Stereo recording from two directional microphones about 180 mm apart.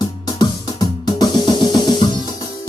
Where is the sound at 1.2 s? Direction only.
20° left (ahead or behind).